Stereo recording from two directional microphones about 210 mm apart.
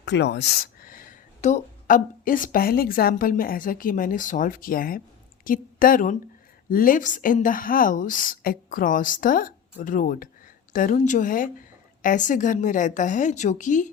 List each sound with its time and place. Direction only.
0.0 s a woman's voice: 55° left (ahead or behind); by 13.9 s 35° left (ahead or behind)